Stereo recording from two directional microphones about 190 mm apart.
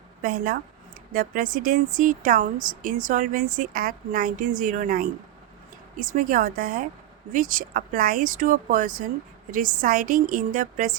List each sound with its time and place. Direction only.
0.2 s a woman's voice: 50° right (ahead or behind)